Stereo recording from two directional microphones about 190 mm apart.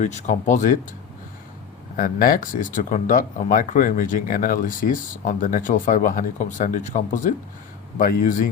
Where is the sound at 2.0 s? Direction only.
45° left (ahead or behind).